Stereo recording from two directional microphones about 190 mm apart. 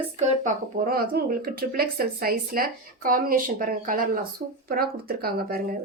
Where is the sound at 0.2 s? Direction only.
45° right (ahead or behind).